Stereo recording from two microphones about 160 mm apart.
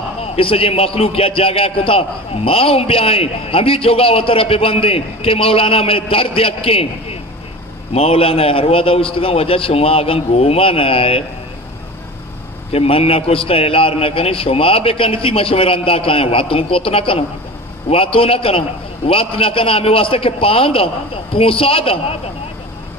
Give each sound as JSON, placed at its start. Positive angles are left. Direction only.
{"t": 0.2, "sound": "a man's voice", "side_deg": 35}
{"t": 12.7, "sound": "a man's voice", "side_deg": 40}